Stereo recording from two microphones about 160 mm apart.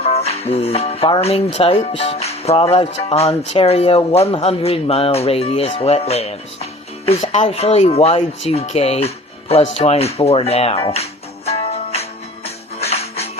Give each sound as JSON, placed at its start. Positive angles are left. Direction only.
{"t": 0.0, "sound": "speech", "side_deg": 40}
{"t": 12.8, "sound": "music", "side_deg": 40}